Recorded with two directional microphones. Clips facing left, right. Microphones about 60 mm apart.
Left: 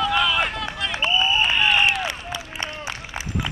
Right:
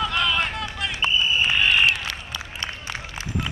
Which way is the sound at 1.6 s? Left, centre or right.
Centre.